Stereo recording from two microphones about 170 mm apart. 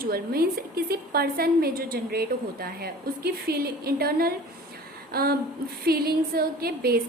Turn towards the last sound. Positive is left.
turn(degrees=-65)  # may be behind; listen again after turning